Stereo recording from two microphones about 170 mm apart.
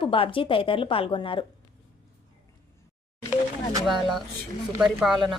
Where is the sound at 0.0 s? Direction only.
30° left (ahead or behind).